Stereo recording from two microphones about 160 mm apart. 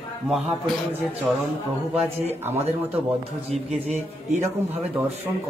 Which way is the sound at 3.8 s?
40° right (ahead or behind).